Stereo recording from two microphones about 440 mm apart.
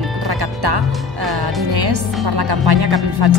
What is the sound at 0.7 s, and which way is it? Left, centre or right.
Speech, right.